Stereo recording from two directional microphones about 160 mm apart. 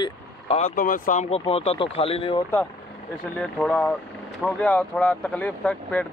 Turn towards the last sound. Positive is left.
turn(degrees=10)  # may be behind; listen again after turning